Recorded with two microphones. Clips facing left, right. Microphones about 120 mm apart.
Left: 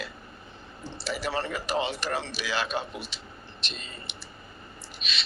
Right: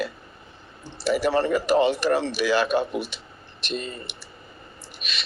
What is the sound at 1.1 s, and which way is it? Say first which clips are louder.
A man's voice: right 10 dB; 55° right (ahead or behind).